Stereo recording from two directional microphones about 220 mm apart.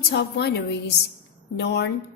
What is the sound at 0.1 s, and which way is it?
A woman's voice, 50° left (ahead or behind).